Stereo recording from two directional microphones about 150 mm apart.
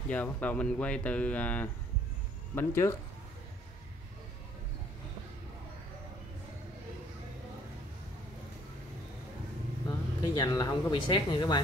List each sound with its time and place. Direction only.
0.1 s speech: 10° left (ahead or behind)
9.8 s speech: 25° left (ahead or behind)